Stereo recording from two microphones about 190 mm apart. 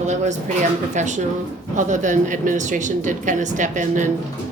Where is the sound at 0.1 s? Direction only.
40° right (ahead or behind).